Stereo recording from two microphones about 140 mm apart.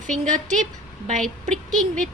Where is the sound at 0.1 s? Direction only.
60° right (ahead or behind).